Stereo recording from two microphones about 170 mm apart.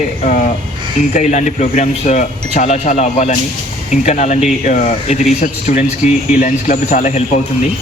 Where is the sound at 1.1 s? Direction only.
45° left (ahead or behind).